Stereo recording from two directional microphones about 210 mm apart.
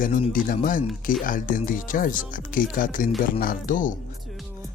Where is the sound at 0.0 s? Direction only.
40° left (ahead or behind).